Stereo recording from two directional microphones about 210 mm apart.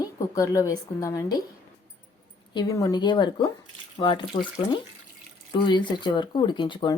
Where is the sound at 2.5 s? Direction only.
15° left (ahead or behind).